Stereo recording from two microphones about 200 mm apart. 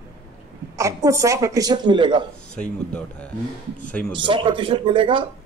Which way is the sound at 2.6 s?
5° left (ahead or behind).